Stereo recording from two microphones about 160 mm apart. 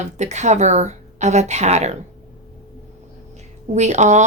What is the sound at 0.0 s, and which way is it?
A woman's voice, 45° right (ahead or behind).